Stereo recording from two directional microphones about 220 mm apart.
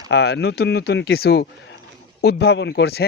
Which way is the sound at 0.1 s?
50° left (ahead or behind).